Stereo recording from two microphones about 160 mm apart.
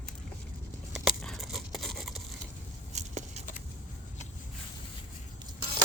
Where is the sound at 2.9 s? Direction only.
45° right (ahead or behind).